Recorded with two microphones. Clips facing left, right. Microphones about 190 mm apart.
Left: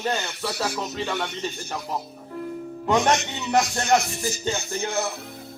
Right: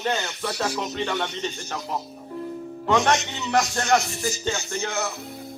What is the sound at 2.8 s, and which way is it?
Speech, 15° left (ahead or behind).